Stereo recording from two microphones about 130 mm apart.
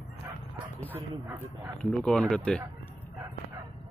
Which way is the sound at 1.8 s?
5° left (ahead or behind).